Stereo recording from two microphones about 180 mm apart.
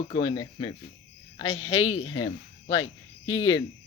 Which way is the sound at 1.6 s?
90° left.